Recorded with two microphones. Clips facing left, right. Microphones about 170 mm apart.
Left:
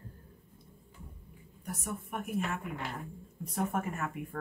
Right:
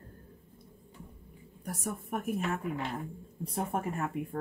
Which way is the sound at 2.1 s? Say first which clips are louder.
Right 4 dB; 40° right (ahead or behind).